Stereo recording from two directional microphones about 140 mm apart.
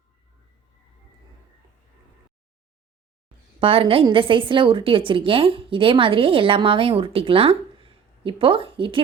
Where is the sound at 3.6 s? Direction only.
40° right (ahead or behind).